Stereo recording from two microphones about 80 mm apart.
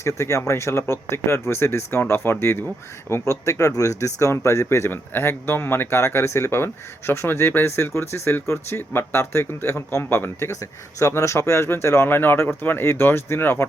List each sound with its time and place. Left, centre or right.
0.0 s speech: left